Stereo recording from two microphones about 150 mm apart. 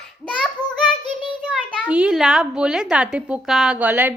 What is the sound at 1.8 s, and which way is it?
Speech, 5° right (ahead or behind).